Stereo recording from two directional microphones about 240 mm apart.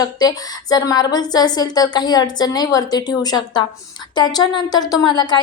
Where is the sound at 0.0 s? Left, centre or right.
Centre.